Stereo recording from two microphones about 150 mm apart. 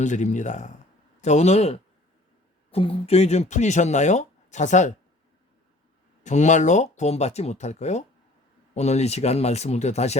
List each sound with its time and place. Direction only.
0.0 s speech: 55° left (ahead or behind)
6.2 s speech: 50° left (ahead or behind)